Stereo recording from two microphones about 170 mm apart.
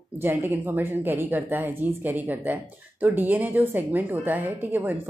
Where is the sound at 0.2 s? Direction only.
15° right (ahead or behind).